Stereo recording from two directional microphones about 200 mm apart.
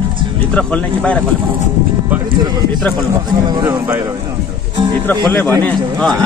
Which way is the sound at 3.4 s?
20° right (ahead or behind).